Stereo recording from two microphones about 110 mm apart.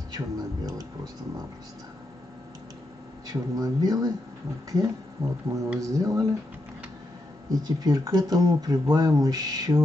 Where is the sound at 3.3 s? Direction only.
35° right (ahead or behind).